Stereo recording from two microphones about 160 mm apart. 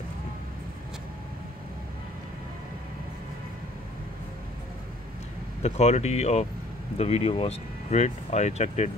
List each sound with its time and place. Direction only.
5.6 s speech: 40° left (ahead or behind)